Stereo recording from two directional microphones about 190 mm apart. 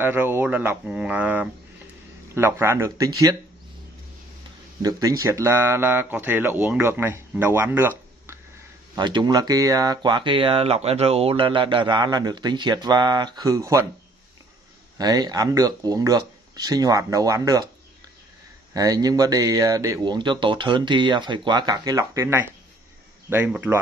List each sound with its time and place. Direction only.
0.0 s speech: 10° right (ahead or behind)
4.8 s speech: 15° right (ahead or behind)
8.9 s speech: 25° right (ahead or behind)
15.0 s speech: 20° right (ahead or behind)
18.7 s speech: 20° right (ahead or behind)